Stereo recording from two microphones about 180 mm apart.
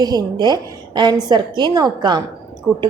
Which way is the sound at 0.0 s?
20° right (ahead or behind).